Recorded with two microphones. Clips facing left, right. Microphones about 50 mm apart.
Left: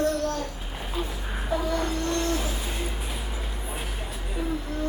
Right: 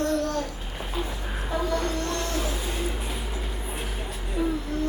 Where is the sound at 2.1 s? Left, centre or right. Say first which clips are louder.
Left 3 dB; centre.